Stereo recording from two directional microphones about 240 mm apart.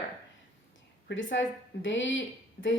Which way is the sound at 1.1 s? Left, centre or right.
Left.